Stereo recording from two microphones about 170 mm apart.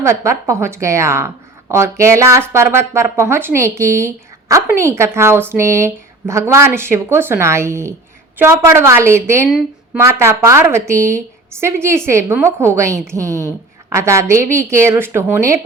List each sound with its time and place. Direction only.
0.0 s speech: 15° right (ahead or behind)
9.5 s speech: 5° right (ahead or behind)
10.0 s speech: 15° right (ahead or behind)